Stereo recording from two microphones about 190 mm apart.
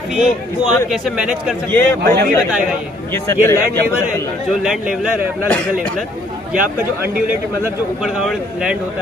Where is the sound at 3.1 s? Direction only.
15° left (ahead or behind).